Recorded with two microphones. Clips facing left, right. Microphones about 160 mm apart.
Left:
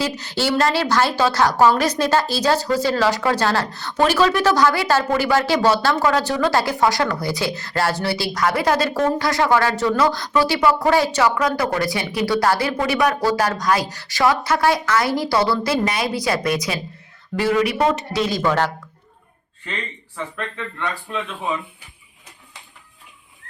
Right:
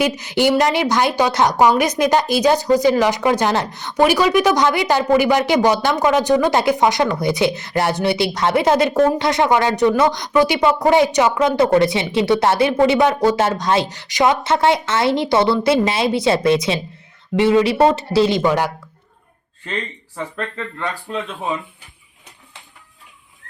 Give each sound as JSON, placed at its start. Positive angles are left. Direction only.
{"t": 0.0, "sound": "a woman's voice", "side_deg": -20}
{"t": 21.2, "sound": "speech", "side_deg": -20}